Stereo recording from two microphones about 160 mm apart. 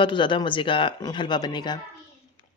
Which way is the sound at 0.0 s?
30° left (ahead or behind).